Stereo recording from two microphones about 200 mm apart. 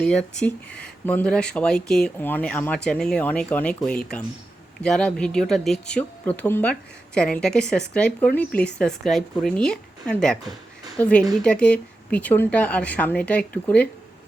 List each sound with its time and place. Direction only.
0.0 s speech: 5° left (ahead or behind)